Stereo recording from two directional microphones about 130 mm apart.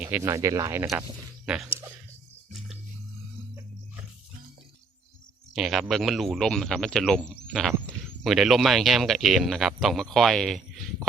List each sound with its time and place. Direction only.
0.0 s speech: 15° right (ahead or behind)
2.5 s music: centre (ahead or behind)
5.5 s speech: centre (ahead or behind)